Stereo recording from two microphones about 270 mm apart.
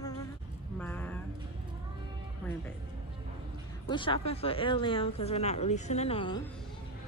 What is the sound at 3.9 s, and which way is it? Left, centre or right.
Speech, centre.